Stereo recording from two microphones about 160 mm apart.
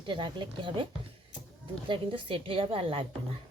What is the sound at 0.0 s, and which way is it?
Speech, 30° right (ahead or behind).